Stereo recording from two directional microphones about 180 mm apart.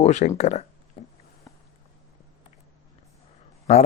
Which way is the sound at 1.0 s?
30° left (ahead or behind).